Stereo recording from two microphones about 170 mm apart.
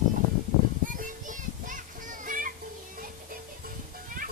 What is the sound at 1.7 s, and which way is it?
Children playing, 50° right (ahead or behind).